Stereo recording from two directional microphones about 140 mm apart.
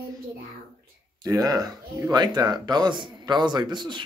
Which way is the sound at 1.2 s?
25° right (ahead or behind).